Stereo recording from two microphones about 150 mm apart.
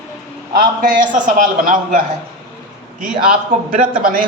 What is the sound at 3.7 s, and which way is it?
Speech, 70° right (ahead or behind).